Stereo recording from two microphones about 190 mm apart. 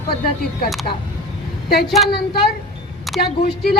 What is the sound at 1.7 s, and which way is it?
A woman's voice, 55° left (ahead or behind).